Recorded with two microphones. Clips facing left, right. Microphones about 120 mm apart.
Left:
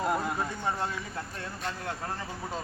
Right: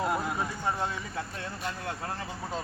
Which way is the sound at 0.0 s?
Centre (ahead or behind).